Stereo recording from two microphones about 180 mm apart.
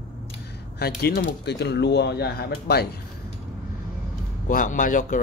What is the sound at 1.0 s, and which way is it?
Speech, 65° left (ahead or behind).